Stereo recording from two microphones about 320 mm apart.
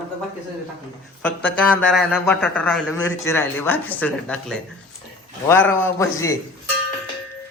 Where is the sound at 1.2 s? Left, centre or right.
Centre.